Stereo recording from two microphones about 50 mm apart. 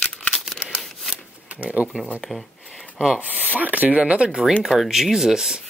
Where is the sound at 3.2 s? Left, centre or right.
Right.